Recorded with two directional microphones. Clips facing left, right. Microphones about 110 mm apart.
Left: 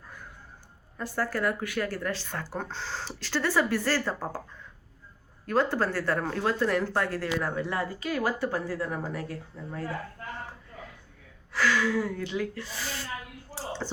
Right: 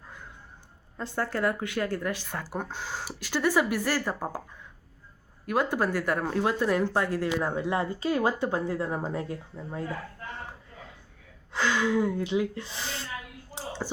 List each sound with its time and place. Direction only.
0.9 s speech: 20° right (ahead or behind)
5.5 s speech: 15° right (ahead or behind)
11.5 s speech: 20° right (ahead or behind)
13.5 s a sound: 15° right (ahead or behind)